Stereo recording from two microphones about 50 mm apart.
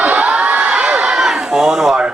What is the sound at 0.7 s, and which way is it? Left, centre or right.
Crowd, right.